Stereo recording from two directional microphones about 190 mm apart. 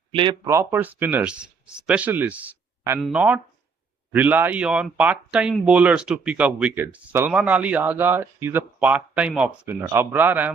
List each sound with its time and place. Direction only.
0.1 s speech: 25° right (ahead or behind)
0.4 s speech: 15° right (ahead or behind)